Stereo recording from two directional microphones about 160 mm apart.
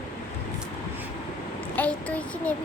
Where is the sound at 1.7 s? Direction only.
10° left (ahead or behind).